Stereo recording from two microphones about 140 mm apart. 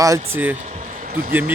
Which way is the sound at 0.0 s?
20° right (ahead or behind).